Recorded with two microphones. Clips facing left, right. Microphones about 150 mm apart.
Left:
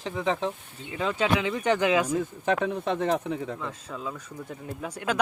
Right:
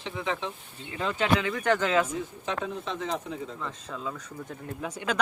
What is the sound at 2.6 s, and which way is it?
Speech, 60° left (ahead or behind).